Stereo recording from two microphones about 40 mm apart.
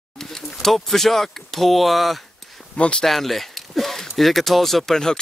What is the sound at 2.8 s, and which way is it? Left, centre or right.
Speech, left.